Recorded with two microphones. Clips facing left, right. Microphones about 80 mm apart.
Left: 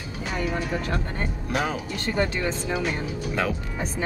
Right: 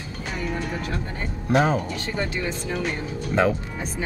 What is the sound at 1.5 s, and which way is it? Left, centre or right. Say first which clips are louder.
Speech: right 7 dB; right.